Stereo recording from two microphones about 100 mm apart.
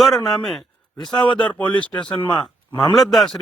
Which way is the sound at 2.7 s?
40° left (ahead or behind).